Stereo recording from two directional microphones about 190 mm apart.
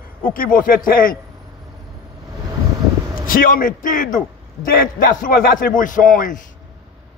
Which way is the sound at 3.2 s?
45° left (ahead or behind).